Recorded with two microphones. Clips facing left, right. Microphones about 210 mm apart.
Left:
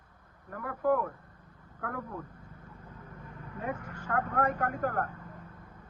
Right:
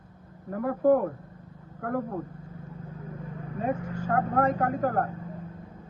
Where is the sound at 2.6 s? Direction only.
25° right (ahead or behind).